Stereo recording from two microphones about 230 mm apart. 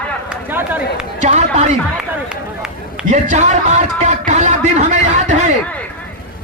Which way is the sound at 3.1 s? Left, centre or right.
Right.